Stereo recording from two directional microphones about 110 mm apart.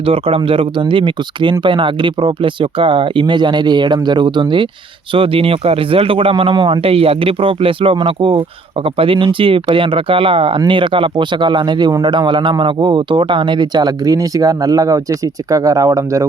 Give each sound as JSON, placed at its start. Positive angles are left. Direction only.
{"t": 0.0, "sound": "a man's voice", "side_deg": -60}